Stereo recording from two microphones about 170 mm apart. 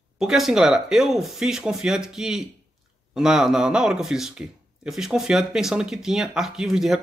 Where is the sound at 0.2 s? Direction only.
Centre (ahead or behind).